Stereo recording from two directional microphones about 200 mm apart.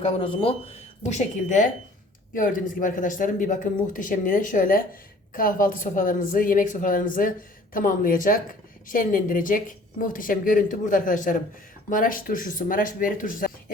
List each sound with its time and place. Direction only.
0.0 s a woman's voice: 30° left (ahead or behind)